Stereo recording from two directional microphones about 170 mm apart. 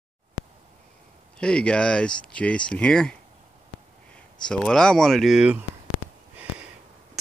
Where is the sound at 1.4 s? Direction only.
5° left (ahead or behind).